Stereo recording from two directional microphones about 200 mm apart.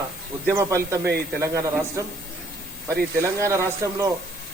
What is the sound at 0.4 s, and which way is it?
Speech, 15° right (ahead or behind).